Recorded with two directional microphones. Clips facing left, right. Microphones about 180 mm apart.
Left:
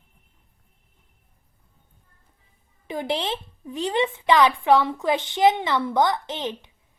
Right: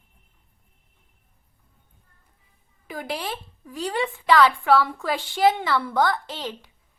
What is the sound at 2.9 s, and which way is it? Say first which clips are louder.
A woman's voice: left 4 dB; 25° left (ahead or behind).